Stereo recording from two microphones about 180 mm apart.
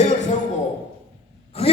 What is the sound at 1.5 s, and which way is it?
Speech, 35° left (ahead or behind).